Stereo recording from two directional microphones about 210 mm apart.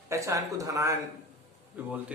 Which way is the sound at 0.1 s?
15° right (ahead or behind).